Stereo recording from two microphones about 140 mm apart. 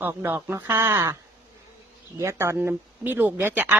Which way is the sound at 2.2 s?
20° right (ahead or behind).